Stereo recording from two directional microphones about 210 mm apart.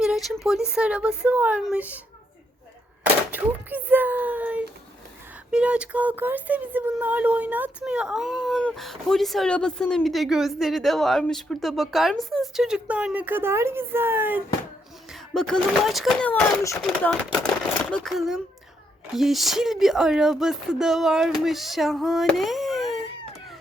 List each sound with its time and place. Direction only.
0.0 s speech: centre (ahead or behind)
3.0 s speech: 5° right (ahead or behind)
15.1 s speech: centre (ahead or behind)